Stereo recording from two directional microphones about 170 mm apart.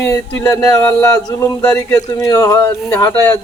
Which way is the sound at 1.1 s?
20° left (ahead or behind).